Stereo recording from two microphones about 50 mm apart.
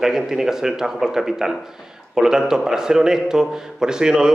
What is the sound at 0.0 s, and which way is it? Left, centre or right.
A man's voice, centre.